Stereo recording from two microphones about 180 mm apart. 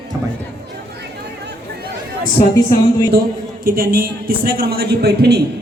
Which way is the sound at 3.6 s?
55° right (ahead or behind).